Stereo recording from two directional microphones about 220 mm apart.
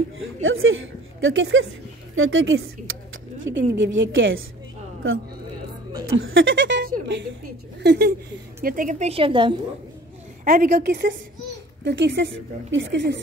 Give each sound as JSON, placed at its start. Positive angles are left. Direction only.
{"t": 0.4, "sound": "a woman's voice", "side_deg": -65}
{"t": 6.0, "sound": "a woman's voice", "side_deg": -65}
{"t": 6.8, "sound": "a sound", "side_deg": -45}
{"t": 7.8, "sound": "speech", "side_deg": -50}
{"t": 8.6, "sound": "a woman's voice", "side_deg": -35}
{"t": 10.4, "sound": "a woman's voice", "side_deg": -40}